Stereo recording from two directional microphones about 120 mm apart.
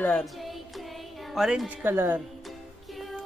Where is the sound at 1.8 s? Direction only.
20° right (ahead or behind).